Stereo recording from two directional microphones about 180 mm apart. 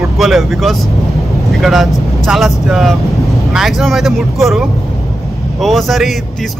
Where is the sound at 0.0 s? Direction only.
Centre (ahead or behind).